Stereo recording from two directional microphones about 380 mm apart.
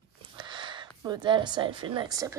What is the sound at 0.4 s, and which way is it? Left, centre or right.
Speech, centre.